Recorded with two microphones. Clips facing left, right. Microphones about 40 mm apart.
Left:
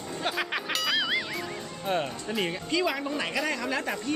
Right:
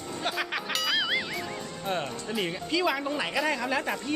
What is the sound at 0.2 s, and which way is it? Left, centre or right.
Music, centre.